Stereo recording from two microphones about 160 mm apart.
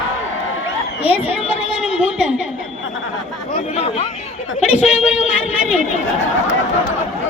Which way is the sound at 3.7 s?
40° left (ahead or behind).